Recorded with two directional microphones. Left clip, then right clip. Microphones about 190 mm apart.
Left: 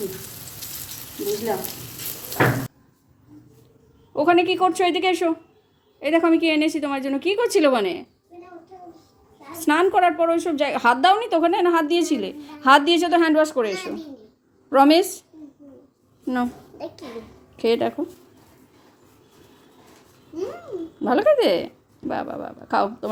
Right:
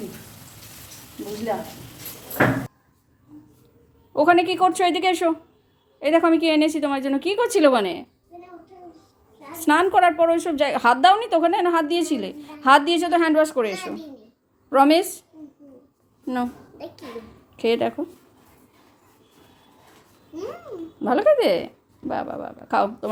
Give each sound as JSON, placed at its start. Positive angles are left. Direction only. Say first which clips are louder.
{"t": 4.1, "sound": "a woman's voice", "louder": "right 1 dB", "side_deg": -15}
{"t": 9.6, "sound": "a woman's voice", "louder": "right 1 dB", "side_deg": -10}
{"t": 16.2, "sound": "a woman's voice", "louder": "left 1 dB", "side_deg": 0}
{"t": 21.0, "sound": "a woman's voice", "louder": "even", "side_deg": 0}